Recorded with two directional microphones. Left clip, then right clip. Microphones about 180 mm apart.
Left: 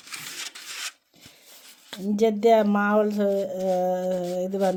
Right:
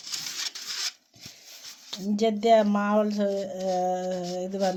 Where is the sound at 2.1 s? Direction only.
50° left (ahead or behind).